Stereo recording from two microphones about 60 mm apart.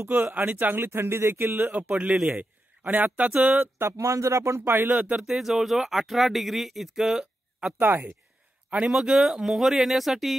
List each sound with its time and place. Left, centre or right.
0.1 s speech: right
0.8 s speech: right
1.7 s a man's voice: right
3.8 s speech: right
4.9 s speech: centre
7.8 s speech: right
8.6 s a sound: centre
8.9 s speech: centre